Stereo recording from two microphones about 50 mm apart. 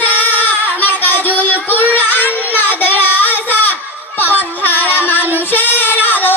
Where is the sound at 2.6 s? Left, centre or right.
Left.